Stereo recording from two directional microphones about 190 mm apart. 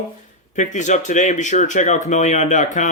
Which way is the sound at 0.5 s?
40° left (ahead or behind).